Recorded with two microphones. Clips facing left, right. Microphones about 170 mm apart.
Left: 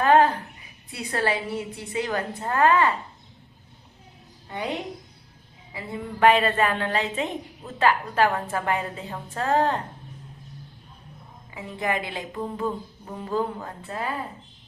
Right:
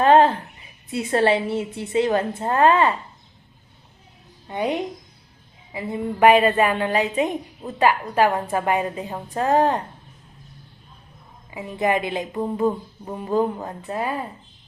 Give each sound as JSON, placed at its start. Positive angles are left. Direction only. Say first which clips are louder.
{"t": 0.0, "sound": "a sound", "louder": "right 3 dB", "side_deg": -25}
{"t": 0.9, "sound": "a woman's voice", "louder": "right 7 dB", "side_deg": -25}
{"t": 4.4, "sound": "a woman's voice", "louder": "right 6 dB", "side_deg": -20}
{"t": 11.5, "sound": "a woman's voice", "louder": "right 6 dB", "side_deg": -20}